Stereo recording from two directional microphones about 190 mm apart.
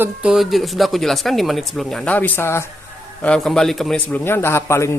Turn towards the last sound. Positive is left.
turn(degrees=15)  # may be behind; listen again after turning